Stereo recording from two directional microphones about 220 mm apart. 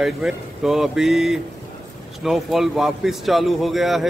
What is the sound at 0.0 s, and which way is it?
A man's voice, centre (ahead or behind).